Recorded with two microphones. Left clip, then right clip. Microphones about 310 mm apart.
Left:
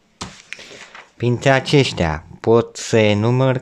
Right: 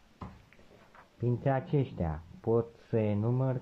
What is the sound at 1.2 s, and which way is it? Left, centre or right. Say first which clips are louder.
Speech: left 16 dB; left.